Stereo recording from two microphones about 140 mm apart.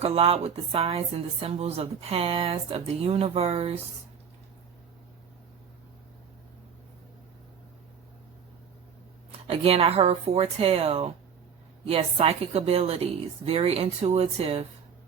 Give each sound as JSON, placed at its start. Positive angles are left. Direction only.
{"t": 0.0, "sound": "speech", "side_deg": -45}
{"t": 9.5, "sound": "speech", "side_deg": -45}